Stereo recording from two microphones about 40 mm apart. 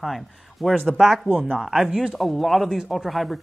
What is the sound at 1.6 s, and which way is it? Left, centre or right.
Speech, centre.